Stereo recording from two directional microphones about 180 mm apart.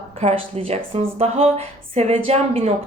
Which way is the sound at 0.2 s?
35° right (ahead or behind).